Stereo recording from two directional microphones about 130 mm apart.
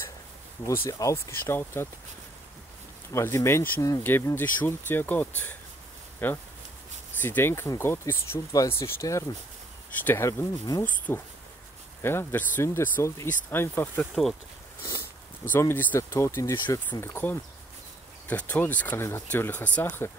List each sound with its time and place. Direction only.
0.7 s speech: 25° left (ahead or behind)
3.1 s speech: 20° left (ahead or behind)
13.9 s speech: centre (ahead or behind)
15.4 s speech: 15° left (ahead or behind)
16.6 s speech: 35° left (ahead or behind)
17.0 s speech: 15° left (ahead or behind)